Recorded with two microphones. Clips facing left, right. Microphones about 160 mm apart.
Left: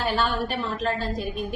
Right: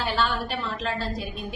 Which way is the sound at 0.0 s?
45° left (ahead or behind).